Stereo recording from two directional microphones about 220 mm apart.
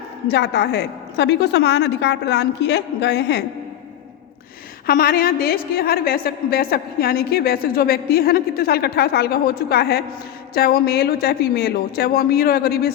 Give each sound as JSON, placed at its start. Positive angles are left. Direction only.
{"t": 0.3, "sound": "a woman's voice", "side_deg": 50}
{"t": 4.9, "sound": "a woman's voice", "side_deg": 40}